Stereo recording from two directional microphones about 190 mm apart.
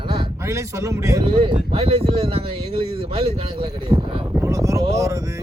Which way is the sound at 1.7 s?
30° right (ahead or behind).